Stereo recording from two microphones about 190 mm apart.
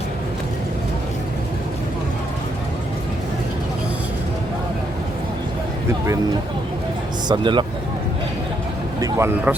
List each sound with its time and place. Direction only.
7.3 s speech: 25° right (ahead or behind)
9.0 s speech: 15° right (ahead or behind)